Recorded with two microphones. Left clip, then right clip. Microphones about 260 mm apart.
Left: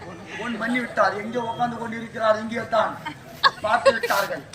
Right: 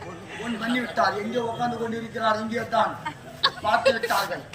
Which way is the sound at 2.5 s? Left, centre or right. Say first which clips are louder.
Left 1 dB; centre.